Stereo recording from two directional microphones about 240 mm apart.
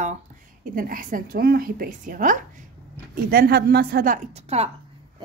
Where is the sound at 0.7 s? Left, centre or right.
Right.